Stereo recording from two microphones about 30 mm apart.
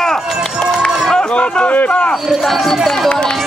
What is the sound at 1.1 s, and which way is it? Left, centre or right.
Speech, left.